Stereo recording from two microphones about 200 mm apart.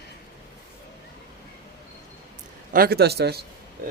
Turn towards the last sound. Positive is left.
turn(degrees=-55)  # may be behind; listen again after turning